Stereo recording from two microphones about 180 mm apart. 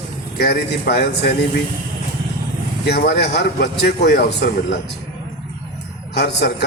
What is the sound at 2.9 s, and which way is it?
A man's voice, 65° left (ahead or behind).